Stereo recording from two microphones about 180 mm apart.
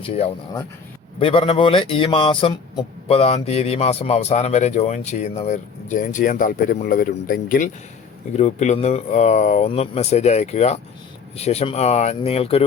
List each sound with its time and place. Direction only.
0.0 s a man's voice: 30° left (ahead or behind); by 7.7 s 50° left (ahead or behind)
8.4 s a man's voice: 40° left (ahead or behind)